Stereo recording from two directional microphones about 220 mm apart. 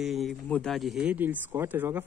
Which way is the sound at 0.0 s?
Centre (ahead or behind).